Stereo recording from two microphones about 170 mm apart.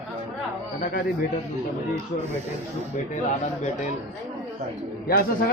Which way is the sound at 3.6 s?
45° left (ahead or behind).